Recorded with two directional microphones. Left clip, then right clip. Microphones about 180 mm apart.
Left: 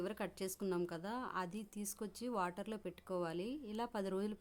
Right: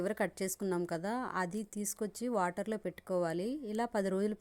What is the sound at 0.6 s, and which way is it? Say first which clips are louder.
Speech: right 4 dB; 15° right (ahead or behind).